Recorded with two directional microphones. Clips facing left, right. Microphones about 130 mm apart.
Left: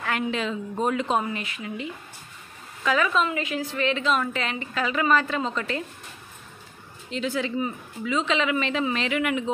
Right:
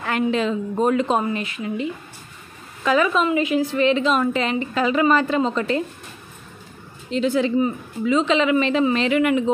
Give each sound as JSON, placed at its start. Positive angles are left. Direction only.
{"t": 0.0, "sound": "a woman's voice", "side_deg": -35}
{"t": 3.1, "sound": "a woman's voice", "side_deg": -15}
{"t": 7.1, "sound": "a woman's voice", "side_deg": -30}